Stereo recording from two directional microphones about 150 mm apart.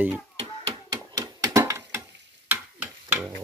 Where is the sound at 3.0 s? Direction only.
15° right (ahead or behind).